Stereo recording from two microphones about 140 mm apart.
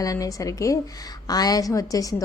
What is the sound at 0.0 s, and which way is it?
A woman's voice, 25° left (ahead or behind).